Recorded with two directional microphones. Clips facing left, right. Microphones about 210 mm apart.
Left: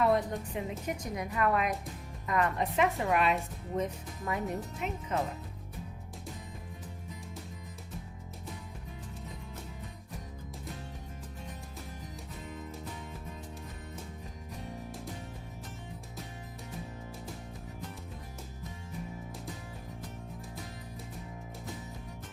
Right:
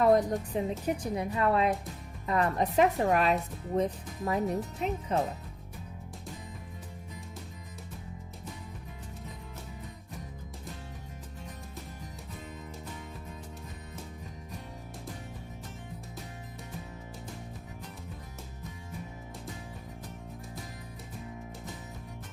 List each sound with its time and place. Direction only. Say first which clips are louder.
0.0 s a woman's voice: right 4 dB; 40° right (ahead or behind)